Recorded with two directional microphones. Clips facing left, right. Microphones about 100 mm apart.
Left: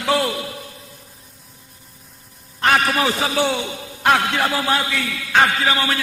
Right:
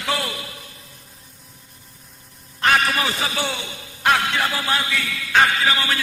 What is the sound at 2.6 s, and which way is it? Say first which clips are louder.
A man's voice: left 2 dB; 35° left (ahead or behind).